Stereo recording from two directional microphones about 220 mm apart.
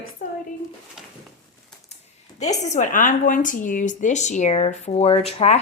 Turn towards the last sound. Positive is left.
turn(degrees=30)  # may be behind; listen again after turning